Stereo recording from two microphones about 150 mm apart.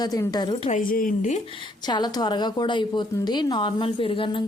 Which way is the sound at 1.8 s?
30° left (ahead or behind).